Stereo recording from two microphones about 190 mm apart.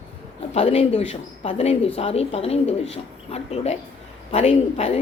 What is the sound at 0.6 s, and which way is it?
Speech, 30° left (ahead or behind).